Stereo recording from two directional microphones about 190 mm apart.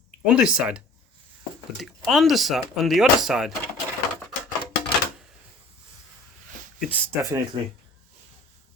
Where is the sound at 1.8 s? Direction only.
Centre (ahead or behind).